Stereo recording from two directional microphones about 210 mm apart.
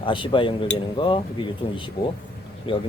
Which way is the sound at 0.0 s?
25° left (ahead or behind).